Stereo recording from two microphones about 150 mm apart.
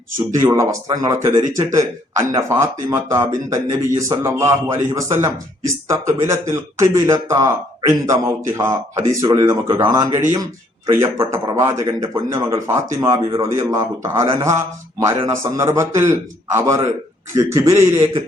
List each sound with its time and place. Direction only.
0.3 s speech: 20° right (ahead or behind)